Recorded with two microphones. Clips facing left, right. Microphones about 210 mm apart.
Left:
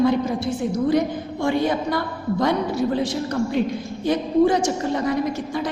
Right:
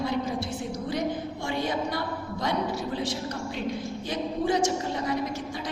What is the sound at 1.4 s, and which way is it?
Speech, 55° left (ahead or behind).